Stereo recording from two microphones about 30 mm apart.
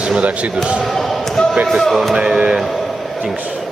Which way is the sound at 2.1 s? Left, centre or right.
Right.